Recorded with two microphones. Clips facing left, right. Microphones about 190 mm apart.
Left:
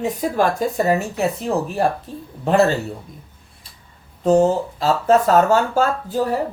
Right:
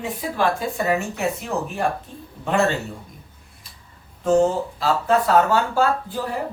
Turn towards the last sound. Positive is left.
turn(degrees=45)  # may be behind; listen again after turning